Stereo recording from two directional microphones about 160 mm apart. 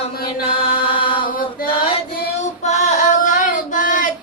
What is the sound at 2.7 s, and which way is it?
Female singing, 45° left (ahead or behind).